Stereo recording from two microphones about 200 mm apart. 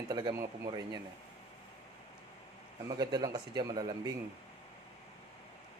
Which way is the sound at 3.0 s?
20° right (ahead or behind).